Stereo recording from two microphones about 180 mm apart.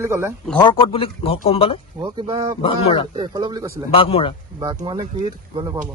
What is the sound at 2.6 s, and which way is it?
Speech, 30° left (ahead or behind).